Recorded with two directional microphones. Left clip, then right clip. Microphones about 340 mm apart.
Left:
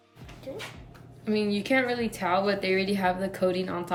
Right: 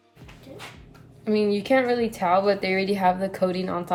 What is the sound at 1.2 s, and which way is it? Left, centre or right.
A woman's voice, centre.